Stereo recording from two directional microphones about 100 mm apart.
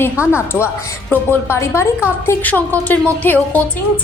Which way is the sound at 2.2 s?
15° left (ahead or behind).